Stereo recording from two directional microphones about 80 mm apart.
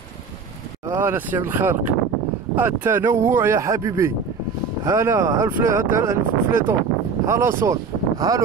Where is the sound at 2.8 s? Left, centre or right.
Right.